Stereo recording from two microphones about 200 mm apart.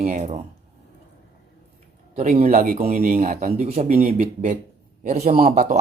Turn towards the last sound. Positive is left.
turn(degrees=-35)  # may be behind; listen again after turning